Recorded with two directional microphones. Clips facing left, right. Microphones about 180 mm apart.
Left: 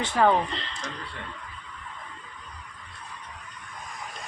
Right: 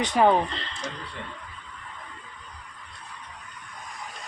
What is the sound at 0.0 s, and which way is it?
Speech, 15° right (ahead or behind).